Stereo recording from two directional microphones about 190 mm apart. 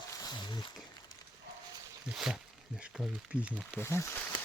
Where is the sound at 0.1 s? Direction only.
20° left (ahead or behind).